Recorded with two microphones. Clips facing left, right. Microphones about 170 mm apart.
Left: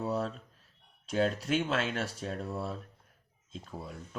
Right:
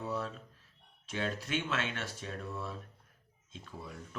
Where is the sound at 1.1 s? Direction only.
40° left (ahead or behind).